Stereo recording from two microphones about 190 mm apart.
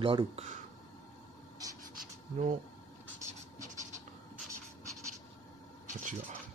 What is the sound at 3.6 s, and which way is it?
Scratch, 40° right (ahead or behind).